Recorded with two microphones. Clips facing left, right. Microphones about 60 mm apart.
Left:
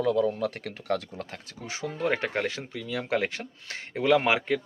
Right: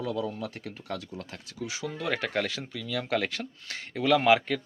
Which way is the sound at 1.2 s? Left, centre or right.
Left.